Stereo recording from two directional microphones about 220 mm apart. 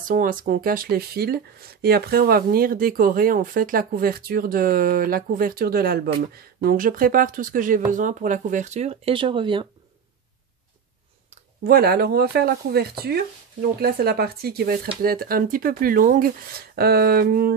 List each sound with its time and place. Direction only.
0.1 s speech: 40° right (ahead or behind); by 9.7 s 20° right (ahead or behind)
11.6 s speech: 45° right (ahead or behind)